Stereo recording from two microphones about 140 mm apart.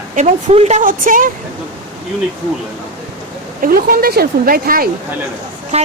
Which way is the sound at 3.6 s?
90° right.